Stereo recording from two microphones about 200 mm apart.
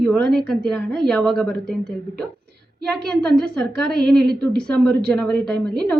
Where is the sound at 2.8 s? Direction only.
5° left (ahead or behind).